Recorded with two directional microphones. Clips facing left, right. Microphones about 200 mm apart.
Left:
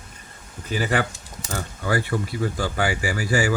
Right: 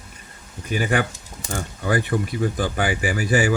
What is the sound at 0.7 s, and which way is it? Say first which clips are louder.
Speech: right 1 dB; 15° right (ahead or behind).